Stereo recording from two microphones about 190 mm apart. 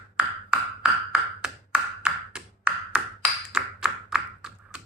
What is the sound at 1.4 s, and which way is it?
Ping, 5° right (ahead or behind).